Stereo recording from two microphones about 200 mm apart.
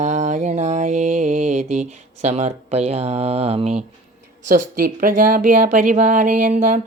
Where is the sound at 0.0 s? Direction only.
35° right (ahead or behind).